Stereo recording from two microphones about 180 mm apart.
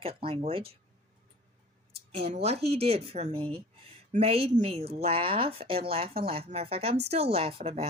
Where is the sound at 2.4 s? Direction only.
35° right (ahead or behind).